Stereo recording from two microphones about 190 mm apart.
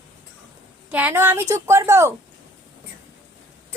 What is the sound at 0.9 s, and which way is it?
A woman's voice, 10° right (ahead or behind).